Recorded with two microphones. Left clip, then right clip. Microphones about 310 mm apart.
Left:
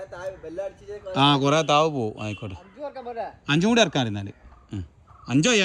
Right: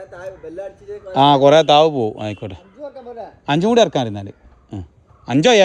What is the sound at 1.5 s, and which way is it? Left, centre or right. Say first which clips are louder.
Speech: right 9 dB; right.